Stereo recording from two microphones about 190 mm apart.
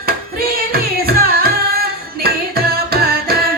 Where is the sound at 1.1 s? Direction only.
55° right (ahead or behind).